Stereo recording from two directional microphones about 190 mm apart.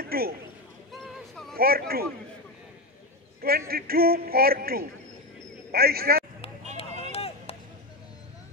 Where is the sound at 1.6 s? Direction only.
55° right (ahead or behind).